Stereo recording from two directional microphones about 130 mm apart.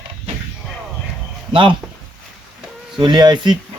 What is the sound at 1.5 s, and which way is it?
Speech, 40° right (ahead or behind).